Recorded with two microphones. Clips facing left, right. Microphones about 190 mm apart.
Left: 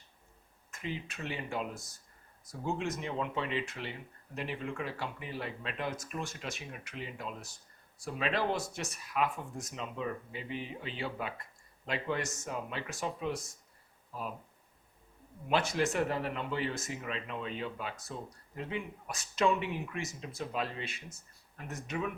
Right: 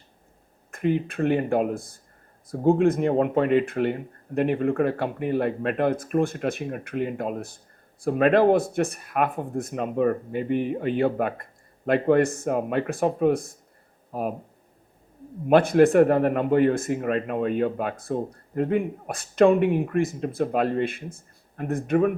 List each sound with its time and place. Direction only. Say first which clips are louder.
0.7 s speech: right 16 dB; 55° right (ahead or behind)
15.4 s speech: right 14 dB; 55° right (ahead or behind)